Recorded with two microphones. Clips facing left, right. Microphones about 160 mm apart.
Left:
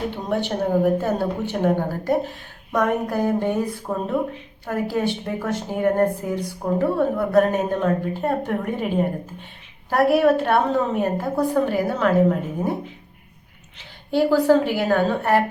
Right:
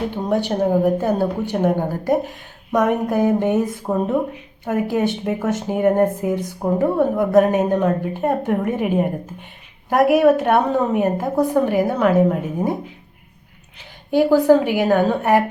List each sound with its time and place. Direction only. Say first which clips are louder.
0.4 s a woman's voice: right 1 dB; 15° right (ahead or behind)
14.1 s a woman's voice: right 3 dB; 15° right (ahead or behind)